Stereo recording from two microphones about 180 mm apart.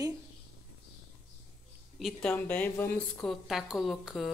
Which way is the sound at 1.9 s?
Centre (ahead or behind).